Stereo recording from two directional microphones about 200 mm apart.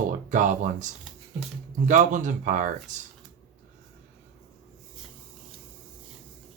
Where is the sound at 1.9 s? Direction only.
40° right (ahead or behind).